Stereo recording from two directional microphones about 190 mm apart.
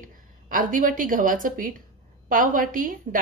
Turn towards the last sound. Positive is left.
turn(degrees=-45)  # may be behind; listen again after turning